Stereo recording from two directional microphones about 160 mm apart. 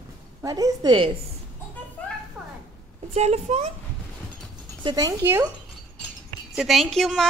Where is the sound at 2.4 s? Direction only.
15° right (ahead or behind).